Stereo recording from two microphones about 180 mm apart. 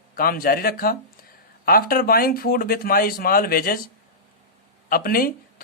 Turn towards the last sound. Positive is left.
turn(degrees=55)  # may be behind; listen again after turning